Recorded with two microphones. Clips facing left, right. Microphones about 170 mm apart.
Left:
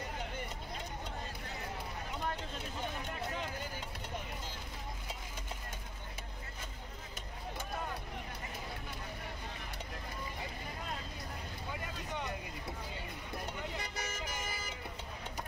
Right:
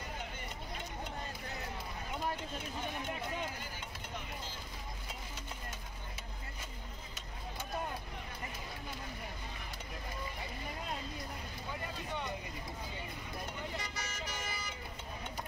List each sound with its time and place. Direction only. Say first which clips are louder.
13.9 s music: left 2 dB; 50° left (ahead or behind)